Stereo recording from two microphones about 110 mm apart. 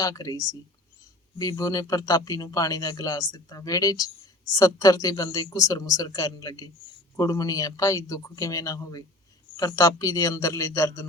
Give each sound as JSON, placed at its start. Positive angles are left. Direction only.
{"t": 0.0, "sound": "a man's voice", "side_deg": 30}